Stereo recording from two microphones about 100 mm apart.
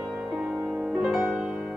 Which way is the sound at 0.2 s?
10° right (ahead or behind).